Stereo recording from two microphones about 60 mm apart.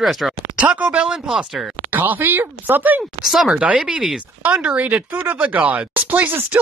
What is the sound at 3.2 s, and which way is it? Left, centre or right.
Speech, centre.